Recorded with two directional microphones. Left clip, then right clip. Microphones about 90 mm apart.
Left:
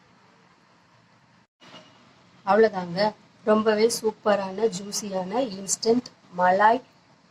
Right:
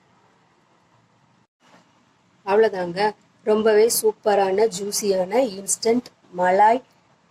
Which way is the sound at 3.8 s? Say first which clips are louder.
Right 4 dB; 25° right (ahead or behind).